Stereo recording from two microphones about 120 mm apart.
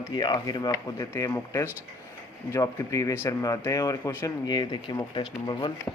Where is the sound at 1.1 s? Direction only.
25° left (ahead or behind); by 5.7 s 40° left (ahead or behind).